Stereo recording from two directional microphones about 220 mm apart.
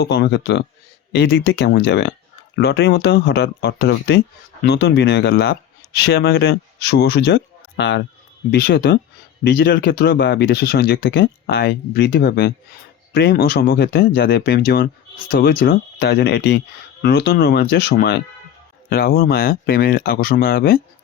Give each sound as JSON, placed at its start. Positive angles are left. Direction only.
{"t": 0.0, "sound": "speech", "side_deg": 50}